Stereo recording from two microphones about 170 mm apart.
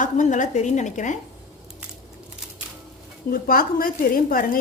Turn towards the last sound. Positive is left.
turn(degrees=55)  # may be behind; listen again after turning